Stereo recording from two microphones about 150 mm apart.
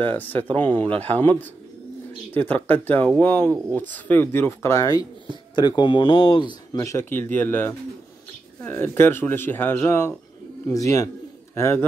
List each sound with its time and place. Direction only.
0.0 s speech: 10° left (ahead or behind); by 6.8 s 30° left (ahead or behind)
6.8 s a man's voice: 20° left (ahead or behind)